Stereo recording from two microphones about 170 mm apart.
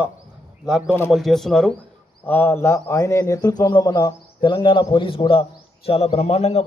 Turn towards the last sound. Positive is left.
turn(degrees=40)  # may be behind; listen again after turning